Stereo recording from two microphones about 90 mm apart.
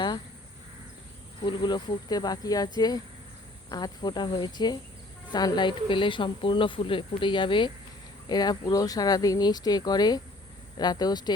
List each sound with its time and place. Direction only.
1.5 s speech: 55° left (ahead or behind)
8.3 s speech: 50° left (ahead or behind)